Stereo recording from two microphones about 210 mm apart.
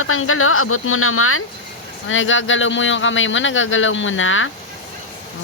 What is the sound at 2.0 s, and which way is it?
Speech, 65° left (ahead or behind).